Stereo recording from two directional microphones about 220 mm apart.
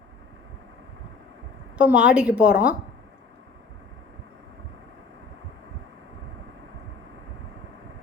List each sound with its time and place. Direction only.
1.8 s a woman's voice: 5° right (ahead or behind)